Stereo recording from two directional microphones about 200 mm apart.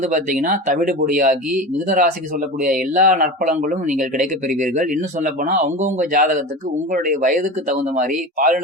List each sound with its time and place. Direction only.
0.0 s speech: 40° right (ahead or behind)